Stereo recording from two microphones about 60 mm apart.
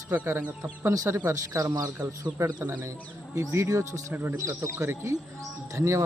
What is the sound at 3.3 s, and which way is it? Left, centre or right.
Speech, right.